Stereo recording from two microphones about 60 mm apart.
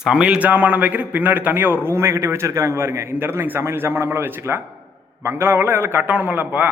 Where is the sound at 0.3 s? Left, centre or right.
Right.